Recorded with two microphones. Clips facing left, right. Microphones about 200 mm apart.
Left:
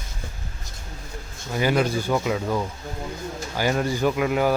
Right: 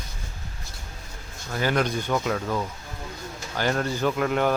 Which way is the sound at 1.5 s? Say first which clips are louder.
Left 3 dB; 10° left (ahead or behind).